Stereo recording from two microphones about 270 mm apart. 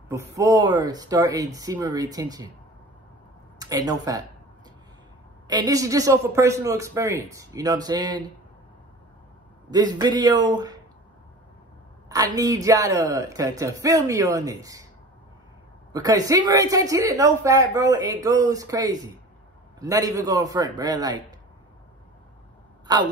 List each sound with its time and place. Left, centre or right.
0.1 s a man's voice: centre
3.5 s speech: centre
5.5 s a man's voice: centre
9.7 s a man's voice: centre
12.1 s a man's voice: centre
15.9 s a man's voice: centre
22.9 s a man's voice: centre